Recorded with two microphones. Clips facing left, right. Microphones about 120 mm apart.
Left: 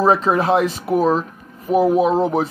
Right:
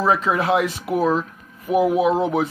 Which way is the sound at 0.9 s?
20° left (ahead or behind).